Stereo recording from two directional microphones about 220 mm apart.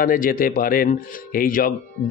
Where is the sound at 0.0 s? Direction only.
40° left (ahead or behind).